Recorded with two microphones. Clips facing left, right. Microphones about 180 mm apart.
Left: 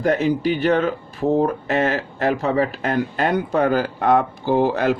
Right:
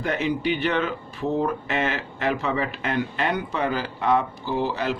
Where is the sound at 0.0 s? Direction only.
40° left (ahead or behind).